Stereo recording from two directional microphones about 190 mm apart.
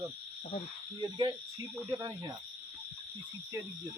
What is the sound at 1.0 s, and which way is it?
Speech, 25° right (ahead or behind).